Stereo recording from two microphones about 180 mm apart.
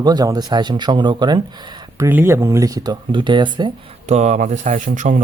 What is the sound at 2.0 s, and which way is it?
Speech, 10° right (ahead or behind).